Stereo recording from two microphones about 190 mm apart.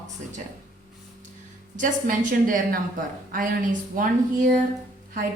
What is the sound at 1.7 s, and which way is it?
Speech, 45° right (ahead or behind).